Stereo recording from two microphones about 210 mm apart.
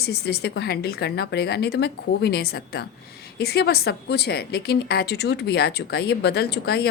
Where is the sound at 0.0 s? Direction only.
50° left (ahead or behind).